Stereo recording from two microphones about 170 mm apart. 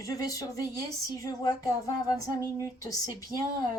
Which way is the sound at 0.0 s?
20° left (ahead or behind).